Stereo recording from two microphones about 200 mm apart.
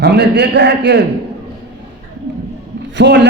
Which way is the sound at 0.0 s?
55° right (ahead or behind).